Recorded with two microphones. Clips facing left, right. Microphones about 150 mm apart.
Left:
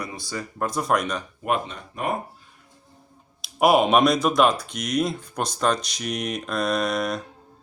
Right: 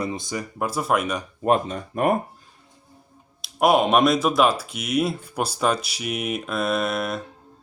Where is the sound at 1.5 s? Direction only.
40° right (ahead or behind).